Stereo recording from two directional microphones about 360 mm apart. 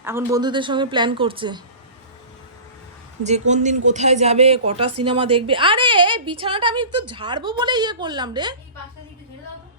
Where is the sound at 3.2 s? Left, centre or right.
Centre.